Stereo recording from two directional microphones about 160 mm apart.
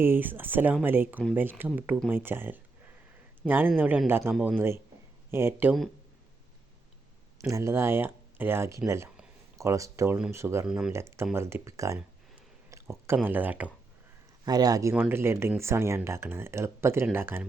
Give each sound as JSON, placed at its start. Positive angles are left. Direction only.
{"t": 0.0, "sound": "speech", "side_deg": -10}
{"t": 7.3, "sound": "speech", "side_deg": -20}
{"t": 10.7, "sound": "speech", "side_deg": -5}
{"t": 10.9, "sound": "speech", "side_deg": -15}
{"t": 12.7, "sound": "a sound", "side_deg": -15}
{"t": 13.2, "sound": "speech", "side_deg": -10}
{"t": 14.4, "sound": "speech", "side_deg": -25}